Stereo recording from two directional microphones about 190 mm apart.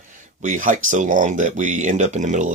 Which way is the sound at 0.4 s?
40° right (ahead or behind).